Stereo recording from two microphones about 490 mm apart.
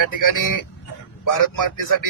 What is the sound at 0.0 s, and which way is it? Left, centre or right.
Speech, left.